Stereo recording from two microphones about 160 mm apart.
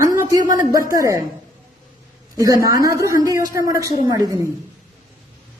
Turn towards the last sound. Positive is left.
turn(degrees=-25)  # may be behind; listen again after turning